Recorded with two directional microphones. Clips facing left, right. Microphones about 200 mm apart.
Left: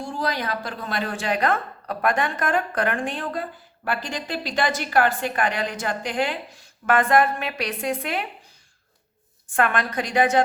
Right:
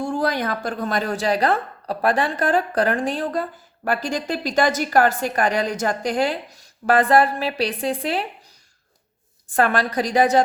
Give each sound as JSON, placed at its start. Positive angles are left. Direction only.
{"t": 0.0, "sound": "a woman's voice", "side_deg": -50}
{"t": 9.6, "sound": "a woman's voice", "side_deg": -35}